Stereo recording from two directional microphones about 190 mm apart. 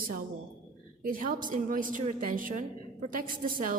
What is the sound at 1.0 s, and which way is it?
A woman's voice, 45° right (ahead or behind).